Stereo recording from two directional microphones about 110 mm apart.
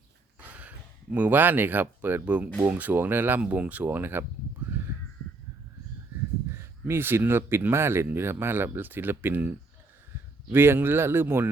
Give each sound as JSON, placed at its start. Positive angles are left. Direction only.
{"t": 1.1, "sound": "speech", "side_deg": -15}
{"t": 4.7, "sound": "crow", "side_deg": -20}
{"t": 6.5, "sound": "speech", "side_deg": -25}